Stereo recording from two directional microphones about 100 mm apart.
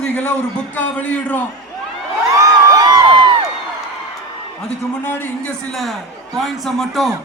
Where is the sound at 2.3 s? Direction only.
35° right (ahead or behind).